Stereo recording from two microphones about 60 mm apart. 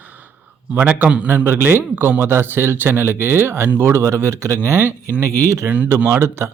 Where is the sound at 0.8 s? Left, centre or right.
Right.